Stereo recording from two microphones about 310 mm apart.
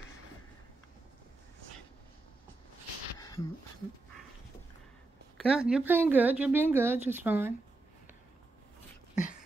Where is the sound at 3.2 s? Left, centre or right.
Centre.